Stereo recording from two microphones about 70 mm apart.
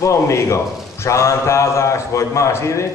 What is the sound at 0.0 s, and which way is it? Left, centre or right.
Speech, left.